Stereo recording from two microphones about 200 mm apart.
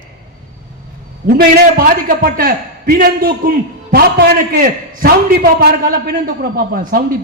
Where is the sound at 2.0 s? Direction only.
45° right (ahead or behind).